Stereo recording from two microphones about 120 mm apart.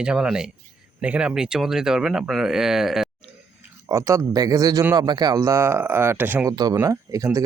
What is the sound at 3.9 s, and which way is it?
Speech, 25° right (ahead or behind).